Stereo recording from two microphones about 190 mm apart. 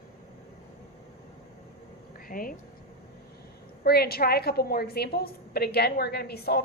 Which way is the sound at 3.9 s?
55° left (ahead or behind).